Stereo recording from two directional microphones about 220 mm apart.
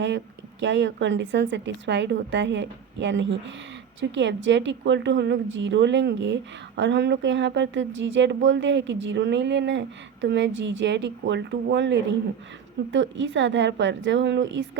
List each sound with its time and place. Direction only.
0.6 s a woman's voice: 55° right (ahead or behind)